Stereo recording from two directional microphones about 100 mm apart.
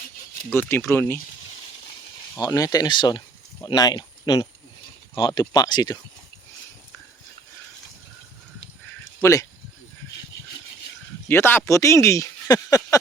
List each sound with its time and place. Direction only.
0.5 s speech: 25° left (ahead or behind)
2.5 s speech: 35° left (ahead or behind)
2.9 s speech: 50° left (ahead or behind)
9.2 s speech: 30° left (ahead or behind)
11.3 s speech: 20° left (ahead or behind)